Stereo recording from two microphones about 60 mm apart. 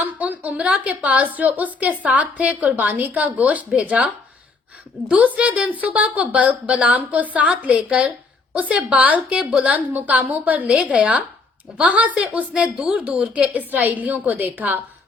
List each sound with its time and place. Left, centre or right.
0.2 s a woman's voice: right